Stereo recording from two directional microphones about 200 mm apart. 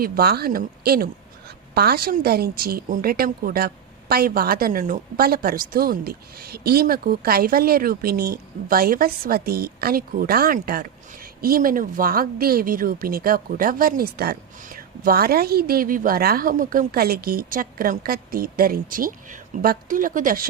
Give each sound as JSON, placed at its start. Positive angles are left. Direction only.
{"t": 0.0, "sound": "speech", "side_deg": -50}